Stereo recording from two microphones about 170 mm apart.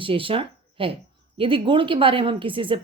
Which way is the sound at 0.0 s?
30° right (ahead or behind).